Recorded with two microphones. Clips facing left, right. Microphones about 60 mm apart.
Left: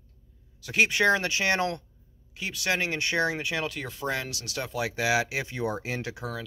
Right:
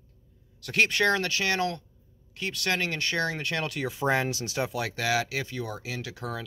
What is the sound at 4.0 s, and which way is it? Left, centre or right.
Speech, right.